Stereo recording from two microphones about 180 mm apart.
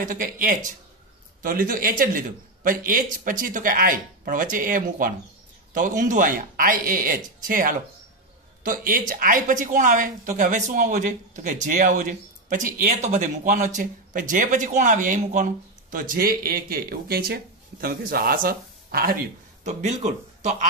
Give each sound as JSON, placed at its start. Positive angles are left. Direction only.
{"t": 0.0, "sound": "speech", "side_deg": -45}
{"t": 19.6, "sound": "speech", "side_deg": -40}